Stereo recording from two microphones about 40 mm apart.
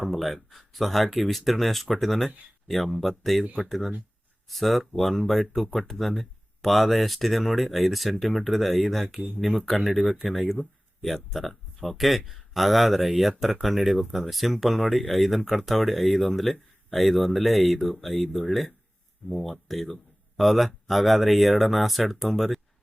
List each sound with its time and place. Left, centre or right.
0.0 s speech: centre
10.2 s speech: centre